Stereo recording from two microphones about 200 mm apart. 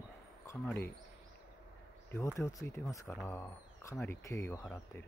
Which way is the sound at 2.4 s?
15° left (ahead or behind).